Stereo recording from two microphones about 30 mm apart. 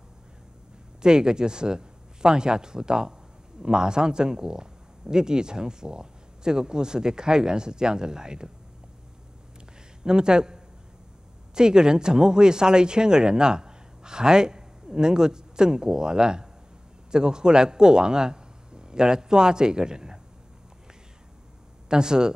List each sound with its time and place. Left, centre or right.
1.0 s speech: right
10.0 s a man's voice: right
21.8 s speech: right